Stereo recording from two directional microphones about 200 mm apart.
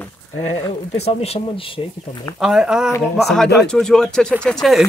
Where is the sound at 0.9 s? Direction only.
30° left (ahead or behind).